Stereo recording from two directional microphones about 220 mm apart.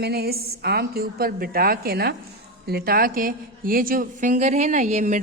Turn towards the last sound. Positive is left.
turn(degrees=-35)  # may be behind; listen again after turning